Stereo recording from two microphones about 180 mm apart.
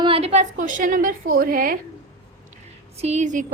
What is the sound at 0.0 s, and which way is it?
Speech, 30° right (ahead or behind).